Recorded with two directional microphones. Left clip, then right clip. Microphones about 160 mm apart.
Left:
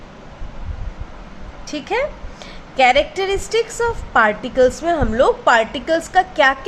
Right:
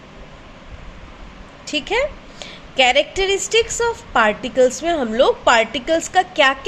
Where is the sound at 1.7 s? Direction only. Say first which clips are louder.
Right 1 dB; 20° right (ahead or behind).